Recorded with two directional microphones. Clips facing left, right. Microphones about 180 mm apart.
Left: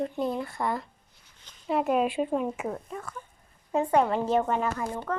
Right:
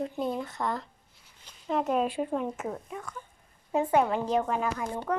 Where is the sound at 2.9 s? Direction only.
Centre (ahead or behind).